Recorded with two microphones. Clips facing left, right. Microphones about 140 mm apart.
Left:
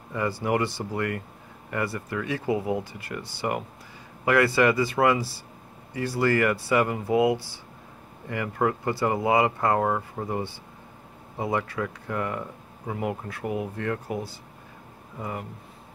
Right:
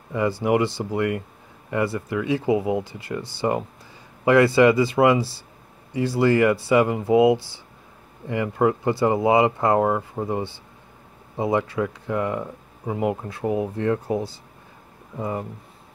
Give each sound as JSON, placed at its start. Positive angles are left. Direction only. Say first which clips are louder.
{"t": 0.1, "sound": "speech", "louder": "right 5 dB", "side_deg": -20}